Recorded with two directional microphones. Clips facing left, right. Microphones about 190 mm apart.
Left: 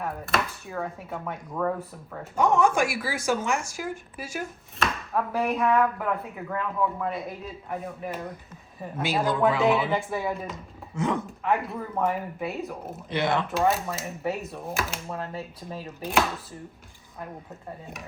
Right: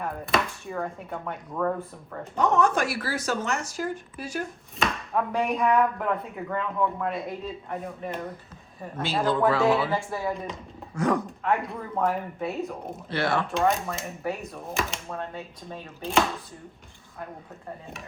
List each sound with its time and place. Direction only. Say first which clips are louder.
0.0 s a man's voice: right 1 dB; centre (ahead or behind); by 9.9 s 20° left (ahead or behind)
9.9 s speech: left 1 dB; centre (ahead or behind)
10.9 s speech: right 2 dB; 25° left (ahead or behind)
11.4 s speech: left 1 dB; centre (ahead or behind)
13.1 s speech: left 1 dB; 20° left (ahead or behind)
13.5 s speech: even; 5° left (ahead or behind)